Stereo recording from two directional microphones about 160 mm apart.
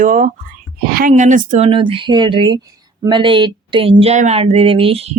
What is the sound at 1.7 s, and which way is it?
Speech, 35° right (ahead or behind).